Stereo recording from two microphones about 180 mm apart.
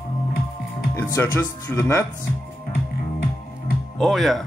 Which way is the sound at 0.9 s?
15° left (ahead or behind).